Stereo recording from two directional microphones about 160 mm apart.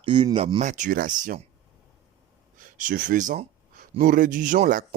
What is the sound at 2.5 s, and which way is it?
Gasp, 55° right (ahead or behind).